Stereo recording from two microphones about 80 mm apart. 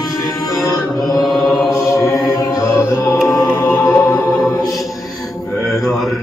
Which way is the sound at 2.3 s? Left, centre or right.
Left.